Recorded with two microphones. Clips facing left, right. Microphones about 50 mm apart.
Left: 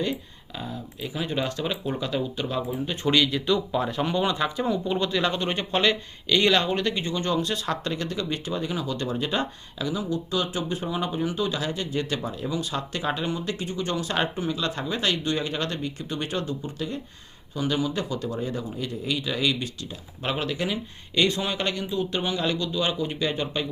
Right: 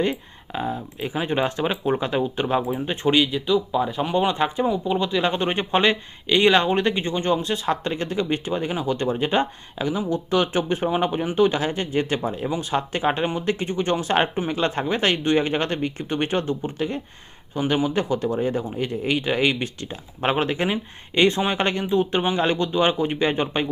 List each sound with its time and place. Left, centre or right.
0.0 s speech: right
3.3 s speech: centre
4.1 s speech: right
4.6 s speech: centre; by 23.6 s right